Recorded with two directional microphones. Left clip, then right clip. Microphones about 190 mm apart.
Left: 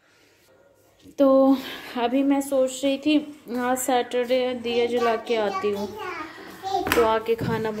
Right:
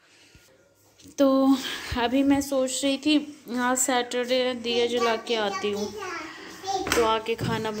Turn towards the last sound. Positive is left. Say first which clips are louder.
# left 3 dB
turn(degrees=5)  # may be behind; listen again after turning